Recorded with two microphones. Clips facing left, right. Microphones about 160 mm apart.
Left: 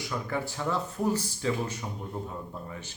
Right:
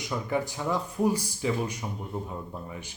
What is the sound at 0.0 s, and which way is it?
A man's voice, 15° right (ahead or behind).